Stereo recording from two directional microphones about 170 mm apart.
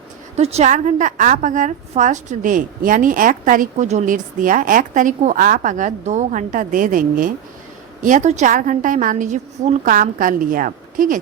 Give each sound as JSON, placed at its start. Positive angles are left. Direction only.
{"t": 0.3, "sound": "a woman's voice", "side_deg": -40}